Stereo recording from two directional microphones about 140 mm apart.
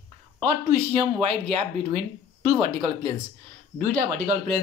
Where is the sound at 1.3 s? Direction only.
45° right (ahead or behind).